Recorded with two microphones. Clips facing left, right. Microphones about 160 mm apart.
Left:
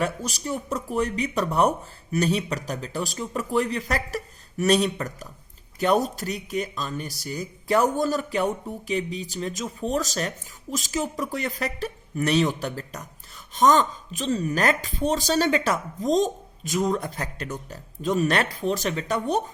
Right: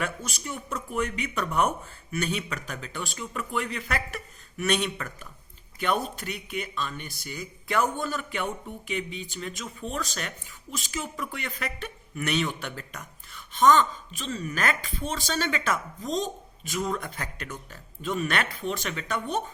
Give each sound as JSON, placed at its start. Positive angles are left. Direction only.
{"t": 0.0, "sound": "speech", "side_deg": 35}